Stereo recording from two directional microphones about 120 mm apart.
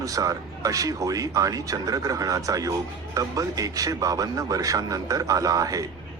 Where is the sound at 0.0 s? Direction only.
30° right (ahead or behind).